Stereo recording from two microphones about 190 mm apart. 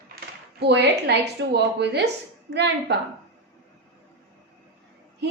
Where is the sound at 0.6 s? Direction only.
60° right (ahead or behind).